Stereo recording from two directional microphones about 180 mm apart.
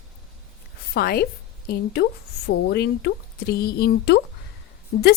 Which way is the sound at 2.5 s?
65° left (ahead or behind).